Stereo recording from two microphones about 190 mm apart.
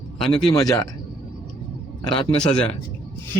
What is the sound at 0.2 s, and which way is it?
Speech, 5° left (ahead or behind).